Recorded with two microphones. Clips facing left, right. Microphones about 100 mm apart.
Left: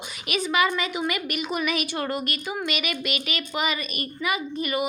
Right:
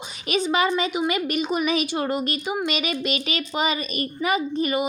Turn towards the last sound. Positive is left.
turn(degrees=-30)  # may be behind; listen again after turning